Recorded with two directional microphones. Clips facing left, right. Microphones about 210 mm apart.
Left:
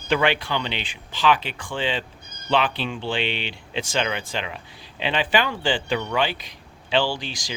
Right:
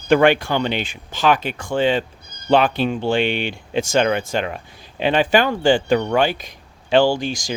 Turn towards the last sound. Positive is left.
turn(degrees=-45)  # may be behind; listen again after turning